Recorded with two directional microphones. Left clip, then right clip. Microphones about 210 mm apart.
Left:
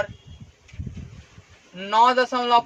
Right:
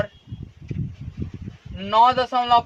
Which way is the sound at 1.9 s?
35° left (ahead or behind).